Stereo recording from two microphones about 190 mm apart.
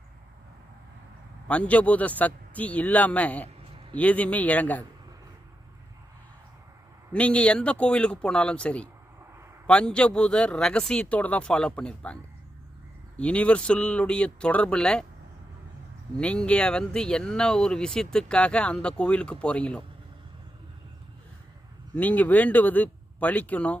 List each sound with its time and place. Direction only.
1.5 s speech: 5° left (ahead or behind)
7.1 s speech: 5° left (ahead or behind)
16.1 s speech: 5° left (ahead or behind)
21.9 s speech: 10° left (ahead or behind)